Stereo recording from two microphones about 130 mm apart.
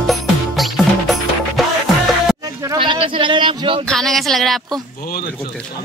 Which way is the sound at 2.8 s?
40° right (ahead or behind).